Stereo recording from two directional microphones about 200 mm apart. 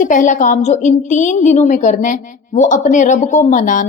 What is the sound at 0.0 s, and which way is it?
A woman's voice, 40° left (ahead or behind).